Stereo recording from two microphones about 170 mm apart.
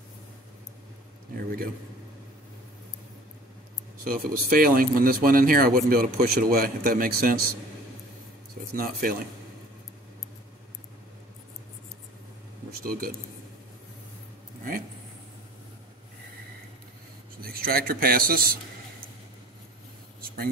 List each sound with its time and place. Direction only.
4.0 s speech: 55° right (ahead or behind)
8.7 s speech: 55° right (ahead or behind)
12.8 s speech: 55° right (ahead or behind)
17.4 s speech: 60° right (ahead or behind)
20.2 s a sound: 60° right (ahead or behind)